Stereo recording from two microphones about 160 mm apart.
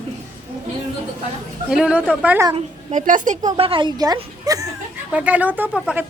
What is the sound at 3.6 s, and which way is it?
A woman's voice, 35° right (ahead or behind).